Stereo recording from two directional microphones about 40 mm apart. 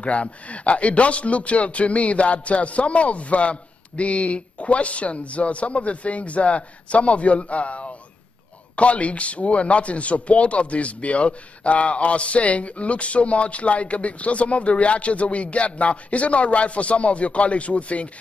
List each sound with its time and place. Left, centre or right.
0.0 s speech: left